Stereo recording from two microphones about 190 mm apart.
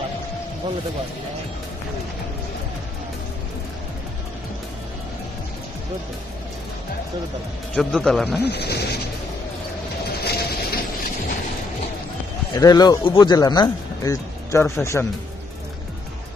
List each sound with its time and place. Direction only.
7.7 s a man's voice: 5° left (ahead or behind)
8.4 s speech: 60° left (ahead or behind)
10.2 s a sound: 55° left (ahead or behind)
12.5 s speech: 20° left (ahead or behind)